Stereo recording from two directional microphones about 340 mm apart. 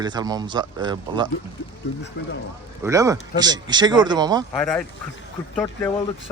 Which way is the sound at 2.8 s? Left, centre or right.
Centre.